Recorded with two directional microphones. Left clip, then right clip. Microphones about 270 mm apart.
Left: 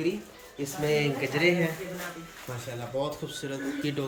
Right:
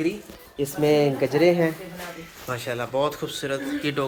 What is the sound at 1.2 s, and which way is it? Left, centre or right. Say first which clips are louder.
Speech: right 5 dB; centre.